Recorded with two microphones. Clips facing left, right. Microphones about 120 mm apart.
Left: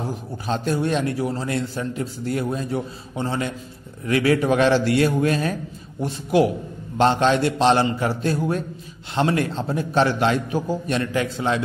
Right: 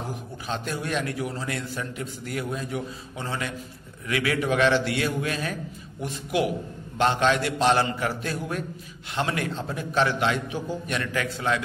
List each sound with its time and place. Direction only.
0.5 s a man's voice: 30° left (ahead or behind)